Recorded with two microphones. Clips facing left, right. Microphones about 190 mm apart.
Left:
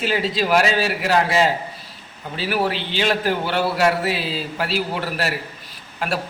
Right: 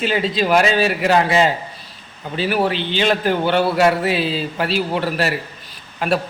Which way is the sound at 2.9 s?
5° left (ahead or behind).